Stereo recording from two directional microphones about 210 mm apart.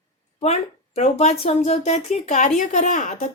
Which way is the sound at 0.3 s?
30° left (ahead or behind).